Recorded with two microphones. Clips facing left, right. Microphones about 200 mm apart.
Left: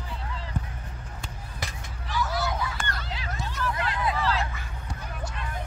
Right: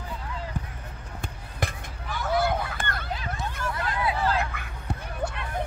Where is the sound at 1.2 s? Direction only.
55° right (ahead or behind).